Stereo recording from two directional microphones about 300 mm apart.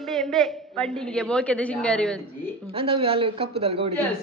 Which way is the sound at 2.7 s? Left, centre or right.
Centre.